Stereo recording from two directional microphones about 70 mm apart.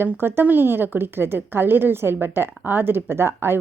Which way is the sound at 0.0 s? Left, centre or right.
Right.